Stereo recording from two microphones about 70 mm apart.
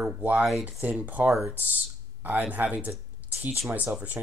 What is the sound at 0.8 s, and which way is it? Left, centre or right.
Speech, right.